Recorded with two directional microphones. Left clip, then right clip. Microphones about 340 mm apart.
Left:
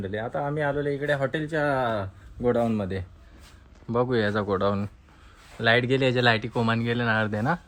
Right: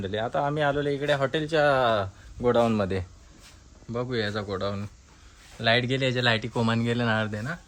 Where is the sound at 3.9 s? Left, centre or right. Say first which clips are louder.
Left 5 dB; centre.